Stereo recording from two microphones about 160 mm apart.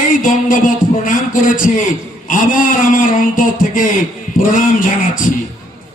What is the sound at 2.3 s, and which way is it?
A man's voice, 60° left (ahead or behind).